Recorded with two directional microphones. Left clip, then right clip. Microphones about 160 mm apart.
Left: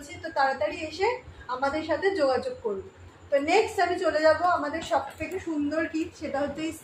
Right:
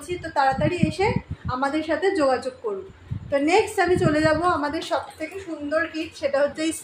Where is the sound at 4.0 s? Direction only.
90° right.